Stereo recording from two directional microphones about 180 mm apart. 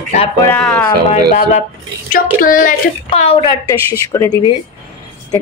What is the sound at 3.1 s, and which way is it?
Speech, 30° left (ahead or behind).